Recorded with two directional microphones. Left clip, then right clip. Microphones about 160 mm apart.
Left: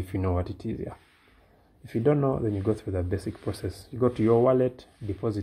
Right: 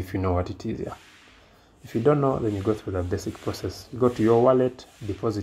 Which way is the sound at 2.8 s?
20° left (ahead or behind).